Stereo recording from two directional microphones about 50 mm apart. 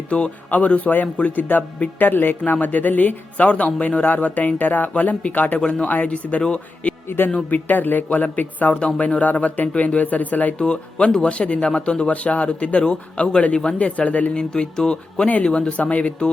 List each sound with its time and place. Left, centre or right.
0.1 s speech: left
1.5 s speech: left
5.5 s speech: centre
5.8 s speech: left
7.5 s speech: left
10.6 s speech: centre
14.5 s speech: centre